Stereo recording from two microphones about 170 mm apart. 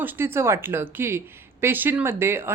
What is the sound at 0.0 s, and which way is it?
Speech, 10° right (ahead or behind).